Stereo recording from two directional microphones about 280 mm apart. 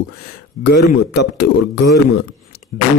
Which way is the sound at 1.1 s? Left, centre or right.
Left.